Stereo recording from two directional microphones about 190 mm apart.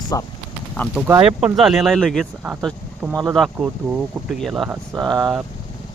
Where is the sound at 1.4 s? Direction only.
Centre (ahead or behind).